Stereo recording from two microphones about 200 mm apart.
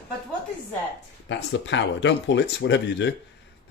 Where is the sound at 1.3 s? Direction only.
65° left (ahead or behind).